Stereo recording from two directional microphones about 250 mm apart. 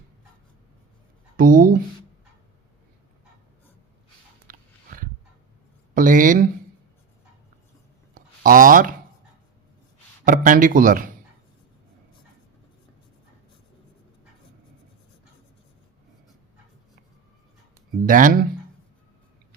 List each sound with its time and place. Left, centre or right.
1.4 s speech: right
4.4 s a sound: right
5.9 s speech: right
8.1 s a sound: right
10.2 s speech: right
18.0 s speech: right